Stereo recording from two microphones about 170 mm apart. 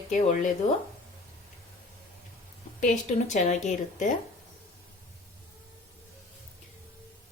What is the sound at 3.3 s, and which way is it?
Speech, 45° left (ahead or behind).